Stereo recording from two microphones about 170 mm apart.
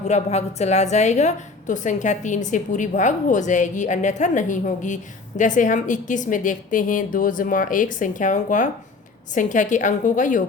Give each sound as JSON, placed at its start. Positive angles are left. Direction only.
{"t": 0.1, "sound": "a woman's voice", "side_deg": 40}